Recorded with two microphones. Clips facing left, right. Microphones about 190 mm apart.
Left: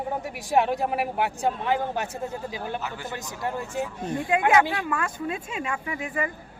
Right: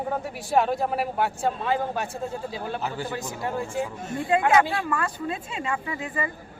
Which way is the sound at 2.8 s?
30° right (ahead or behind).